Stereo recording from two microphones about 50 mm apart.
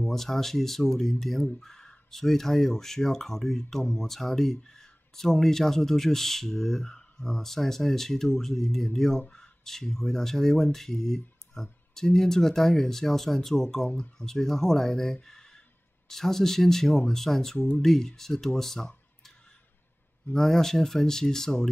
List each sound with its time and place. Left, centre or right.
0.0 s speech: centre
15.2 s a sound: centre
16.1 s speech: centre
17.6 s speech: left
17.8 s speech: centre
20.3 s speech: centre